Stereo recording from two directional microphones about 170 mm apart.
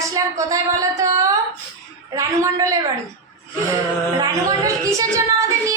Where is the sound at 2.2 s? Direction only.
20° right (ahead or behind).